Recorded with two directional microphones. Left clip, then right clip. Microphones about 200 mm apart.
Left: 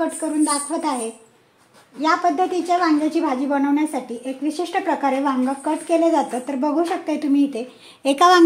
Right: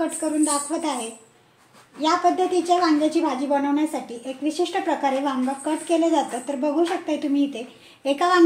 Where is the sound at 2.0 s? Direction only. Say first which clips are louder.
Left 2 dB; 35° left (ahead or behind).